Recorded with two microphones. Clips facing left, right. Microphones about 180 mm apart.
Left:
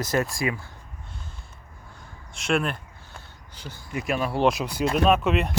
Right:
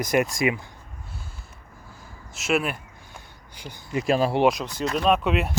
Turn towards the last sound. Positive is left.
turn(degrees=0)  # may be behind; listen again after turning